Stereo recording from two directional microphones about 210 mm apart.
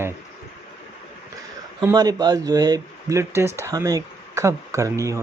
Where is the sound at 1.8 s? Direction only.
20° right (ahead or behind).